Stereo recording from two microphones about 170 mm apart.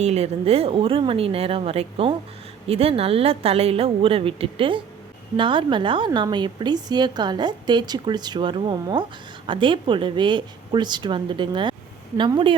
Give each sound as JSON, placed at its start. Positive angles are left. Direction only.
{"t": 0.0, "sound": "a woman's voice", "side_deg": -40}